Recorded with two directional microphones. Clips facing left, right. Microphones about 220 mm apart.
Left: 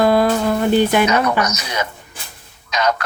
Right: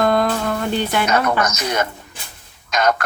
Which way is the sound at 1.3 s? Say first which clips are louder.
Right 1 dB; 50° right (ahead or behind).